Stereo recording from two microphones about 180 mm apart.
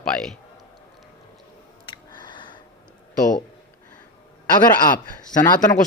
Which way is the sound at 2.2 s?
25° left (ahead or behind).